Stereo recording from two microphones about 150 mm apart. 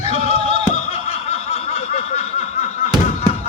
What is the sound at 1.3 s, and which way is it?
Snicker, 40° left (ahead or behind).